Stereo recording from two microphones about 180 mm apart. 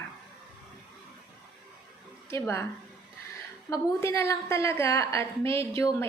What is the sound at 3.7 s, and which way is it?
A woman's voice, 15° left (ahead or behind).